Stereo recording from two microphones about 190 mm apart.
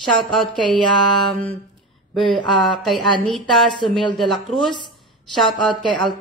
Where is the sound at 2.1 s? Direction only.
Centre (ahead or behind).